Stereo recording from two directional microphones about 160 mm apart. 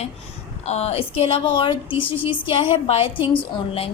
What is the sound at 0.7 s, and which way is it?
A woman's voice, 40° left (ahead or behind).